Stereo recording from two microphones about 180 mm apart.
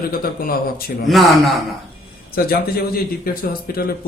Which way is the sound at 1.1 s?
Centre (ahead or behind).